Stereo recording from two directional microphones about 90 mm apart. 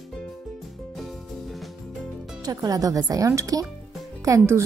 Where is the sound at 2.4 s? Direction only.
45° right (ahead or behind).